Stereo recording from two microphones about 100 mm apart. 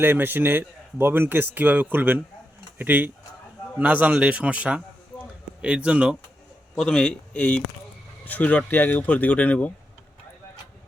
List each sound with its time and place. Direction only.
0.0 s a man's voice: 20° right (ahead or behind)
6.7 s speech: 5° left (ahead or behind)